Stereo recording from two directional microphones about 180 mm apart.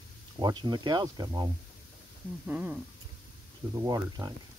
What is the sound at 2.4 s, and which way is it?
Speech, 5° right (ahead or behind).